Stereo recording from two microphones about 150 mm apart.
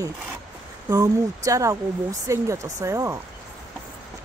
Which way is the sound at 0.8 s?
25° right (ahead or behind).